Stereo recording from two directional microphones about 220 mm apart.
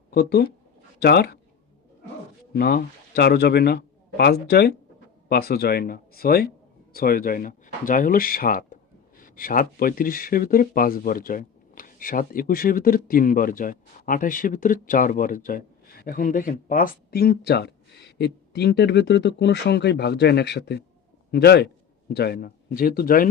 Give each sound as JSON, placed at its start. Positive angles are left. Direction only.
{"t": 0.1, "sound": "speech", "side_deg": 45}
{"t": 2.5, "sound": "a man's voice", "side_deg": 45}